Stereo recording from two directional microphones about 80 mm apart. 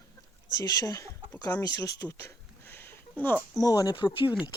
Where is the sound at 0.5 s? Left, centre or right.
Left.